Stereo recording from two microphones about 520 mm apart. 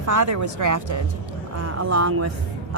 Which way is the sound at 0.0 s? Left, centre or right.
Right.